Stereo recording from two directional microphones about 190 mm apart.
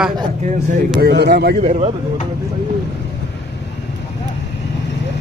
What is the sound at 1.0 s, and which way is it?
Speech, 60° right (ahead or behind).